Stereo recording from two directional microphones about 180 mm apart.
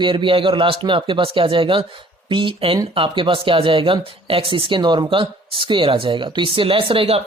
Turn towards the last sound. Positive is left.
turn(degrees=-30)  # may be behind; listen again after turning